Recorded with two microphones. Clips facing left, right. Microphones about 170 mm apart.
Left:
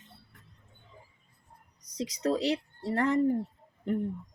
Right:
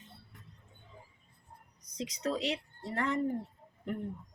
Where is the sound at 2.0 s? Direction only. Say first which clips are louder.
Left 5 dB; 40° left (ahead or behind).